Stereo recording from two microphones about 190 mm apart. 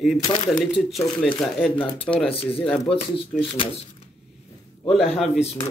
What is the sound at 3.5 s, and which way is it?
Speech, 30° left (ahead or behind).